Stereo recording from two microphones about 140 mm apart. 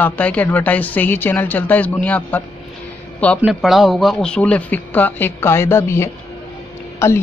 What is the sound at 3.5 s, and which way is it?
A man's voice, centre (ahead or behind).